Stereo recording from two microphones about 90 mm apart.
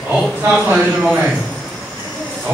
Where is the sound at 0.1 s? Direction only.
20° right (ahead or behind).